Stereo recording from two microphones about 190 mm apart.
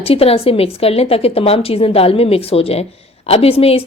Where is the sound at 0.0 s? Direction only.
30° left (ahead or behind).